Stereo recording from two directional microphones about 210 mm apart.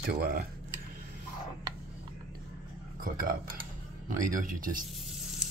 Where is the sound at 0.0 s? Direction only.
45° right (ahead or behind).